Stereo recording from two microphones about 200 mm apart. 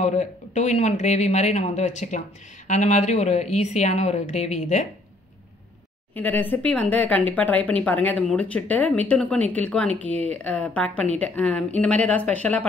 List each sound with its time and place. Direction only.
0.0 s speech: 35° left (ahead or behind)
6.1 s speech: 10° left (ahead or behind)